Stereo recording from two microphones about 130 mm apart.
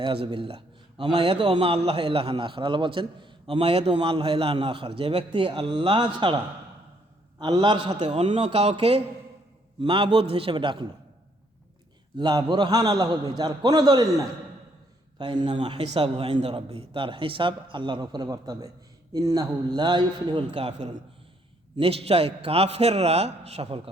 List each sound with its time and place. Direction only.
0.0 s a man's voice: 40° right (ahead or behind)
8.1 s a man's voice: 50° right (ahead or behind)
9.8 s a man's voice: 40° right (ahead or behind)
12.1 s a man's voice: 30° right (ahead or behind); by 21.0 s 60° right (ahead or behind)
21.8 s a man's voice: 50° right (ahead or behind)